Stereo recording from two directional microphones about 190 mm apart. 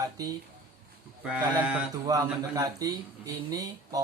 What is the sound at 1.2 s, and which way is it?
Speech, 5° right (ahead or behind).